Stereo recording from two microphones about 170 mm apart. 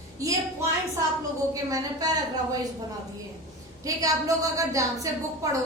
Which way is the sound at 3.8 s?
20° right (ahead or behind).